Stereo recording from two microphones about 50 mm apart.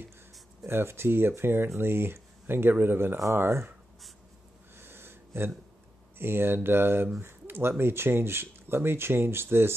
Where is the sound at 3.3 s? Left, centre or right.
Right.